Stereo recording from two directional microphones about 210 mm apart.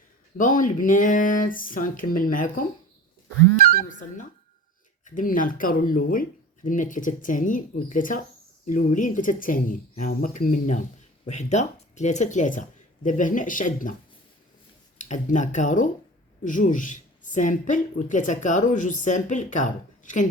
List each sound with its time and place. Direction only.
0.3 s speech: 40° left (ahead or behind)
5.0 s speech: 40° left (ahead or behind)
14.9 s speech: 35° left (ahead or behind)